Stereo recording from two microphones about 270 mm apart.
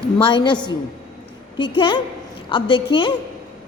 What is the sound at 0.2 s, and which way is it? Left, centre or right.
A woman's voice, centre.